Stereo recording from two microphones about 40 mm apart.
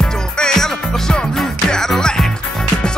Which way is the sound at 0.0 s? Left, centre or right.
Centre.